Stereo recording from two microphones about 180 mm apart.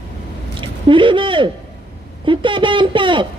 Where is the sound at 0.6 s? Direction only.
30° right (ahead or behind).